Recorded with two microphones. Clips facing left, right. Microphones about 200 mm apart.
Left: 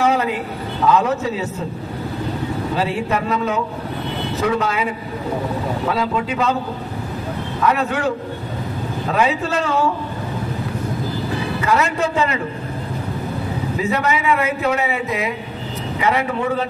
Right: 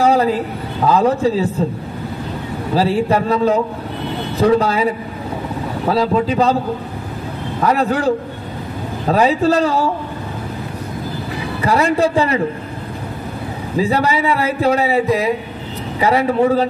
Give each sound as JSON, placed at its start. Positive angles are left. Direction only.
{"t": 0.0, "sound": "a sound", "side_deg": -35}
{"t": 0.8, "sound": "a man's voice", "side_deg": -35}
{"t": 2.7, "sound": "a man's voice", "side_deg": -35}
{"t": 5.9, "sound": "a man's voice", "side_deg": -35}
{"t": 7.6, "sound": "a man's voice", "side_deg": -35}
{"t": 11.6, "sound": "a man's voice", "side_deg": -35}
{"t": 13.7, "sound": "a man's voice", "side_deg": -35}